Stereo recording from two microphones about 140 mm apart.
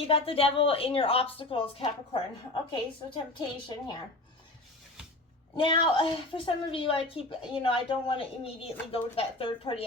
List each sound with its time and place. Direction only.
0.1 s a woman's voice: 40° left (ahead or behind)
3.3 s a woman's voice: 35° left (ahead or behind)
5.5 s a woman's voice: 40° left (ahead or behind)